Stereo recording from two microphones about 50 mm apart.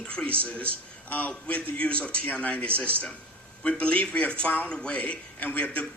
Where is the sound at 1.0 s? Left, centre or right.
Left.